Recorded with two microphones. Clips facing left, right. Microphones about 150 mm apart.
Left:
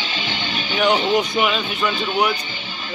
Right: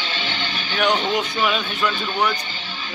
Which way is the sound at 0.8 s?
10° left (ahead or behind).